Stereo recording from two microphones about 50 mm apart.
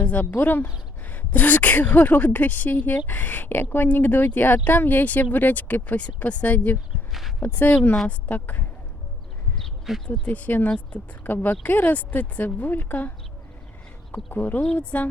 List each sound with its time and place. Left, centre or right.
0.0 s a sound: left
0.3 s speech: left
7.1 s speech: centre
7.4 s speech: left
10.1 s speech: left